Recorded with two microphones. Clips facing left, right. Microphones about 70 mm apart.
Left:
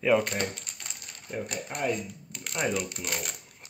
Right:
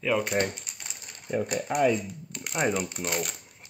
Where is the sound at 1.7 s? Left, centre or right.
Right.